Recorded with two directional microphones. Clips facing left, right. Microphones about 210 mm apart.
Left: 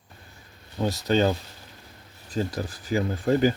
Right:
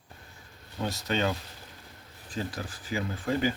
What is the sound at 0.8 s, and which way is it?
Speech, 35° left (ahead or behind).